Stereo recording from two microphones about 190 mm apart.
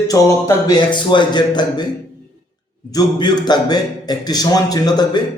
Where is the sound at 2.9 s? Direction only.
20° left (ahead or behind).